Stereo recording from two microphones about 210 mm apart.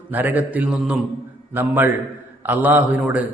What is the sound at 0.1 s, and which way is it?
A man's voice, 10° right (ahead or behind).